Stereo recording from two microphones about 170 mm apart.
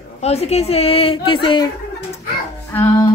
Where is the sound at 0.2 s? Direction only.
40° left (ahead or behind).